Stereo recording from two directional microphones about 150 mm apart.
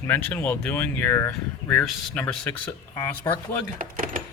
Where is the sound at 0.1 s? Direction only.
10° left (ahead or behind).